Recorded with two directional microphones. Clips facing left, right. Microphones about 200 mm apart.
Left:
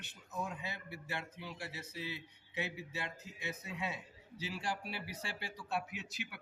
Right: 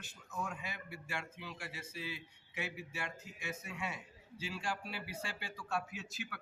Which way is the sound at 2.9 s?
20° left (ahead or behind).